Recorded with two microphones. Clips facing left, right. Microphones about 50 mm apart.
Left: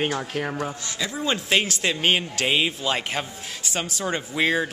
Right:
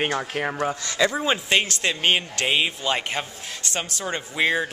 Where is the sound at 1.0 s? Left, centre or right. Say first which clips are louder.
Right 9 dB; right.